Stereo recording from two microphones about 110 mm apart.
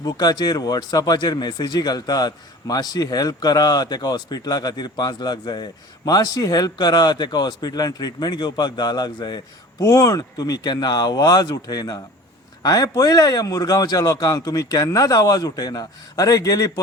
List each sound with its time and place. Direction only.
0.0 s speech: 40° left (ahead or behind)
9.8 s speech: 30° left (ahead or behind)